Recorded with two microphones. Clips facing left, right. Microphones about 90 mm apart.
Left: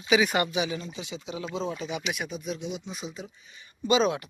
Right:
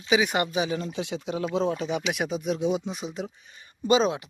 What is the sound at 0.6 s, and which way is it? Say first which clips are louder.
Speech: right 3 dB; 45° right (ahead or behind).